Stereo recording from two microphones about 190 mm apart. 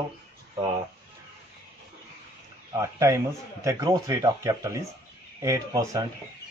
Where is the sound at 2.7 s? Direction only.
15° right (ahead or behind).